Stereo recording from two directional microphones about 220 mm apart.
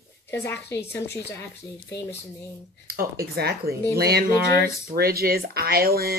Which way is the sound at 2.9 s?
45° right (ahead or behind).